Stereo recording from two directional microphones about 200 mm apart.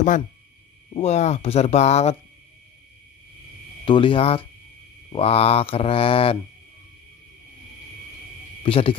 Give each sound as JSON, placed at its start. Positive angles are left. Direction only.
{"t": 0.8, "sound": "speech", "side_deg": 30}
{"t": 3.8, "sound": "mantra", "side_deg": 25}
{"t": 8.6, "sound": "speech", "side_deg": 30}